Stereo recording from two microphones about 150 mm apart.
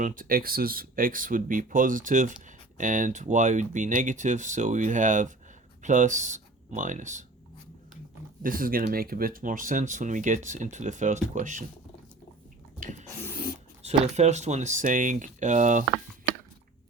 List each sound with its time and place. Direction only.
0.0 s speech: 65° right (ahead or behind)
8.4 s speech: 70° right (ahead or behind)
12.8 s a sound: 55° right (ahead or behind)
13.8 s speech: 45° right (ahead or behind)